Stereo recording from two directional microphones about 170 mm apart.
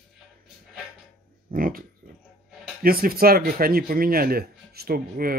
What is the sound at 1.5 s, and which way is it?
Speech, 55° right (ahead or behind).